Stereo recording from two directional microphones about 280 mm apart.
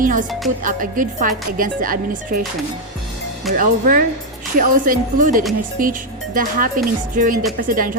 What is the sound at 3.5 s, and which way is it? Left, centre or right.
Speech, right.